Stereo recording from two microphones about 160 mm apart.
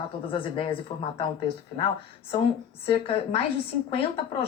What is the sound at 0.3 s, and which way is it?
Speech, 35° left (ahead or behind).